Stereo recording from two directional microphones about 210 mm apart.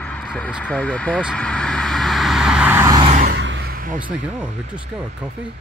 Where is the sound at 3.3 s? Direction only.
60° right (ahead or behind); by 4.1 s 40° right (ahead or behind).